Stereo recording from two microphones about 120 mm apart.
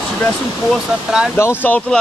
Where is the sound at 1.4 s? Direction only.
20° left (ahead or behind).